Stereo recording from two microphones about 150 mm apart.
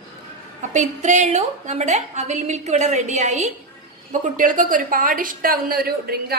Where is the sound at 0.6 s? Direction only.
55° right (ahead or behind).